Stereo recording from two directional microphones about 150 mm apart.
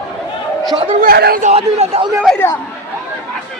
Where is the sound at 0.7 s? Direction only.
35° right (ahead or behind).